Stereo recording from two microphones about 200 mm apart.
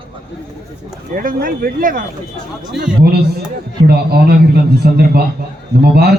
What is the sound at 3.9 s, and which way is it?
A man's voice, 50° right (ahead or behind).